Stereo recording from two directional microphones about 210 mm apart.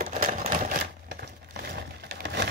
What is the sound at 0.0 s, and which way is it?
Typewriter, 40° right (ahead or behind).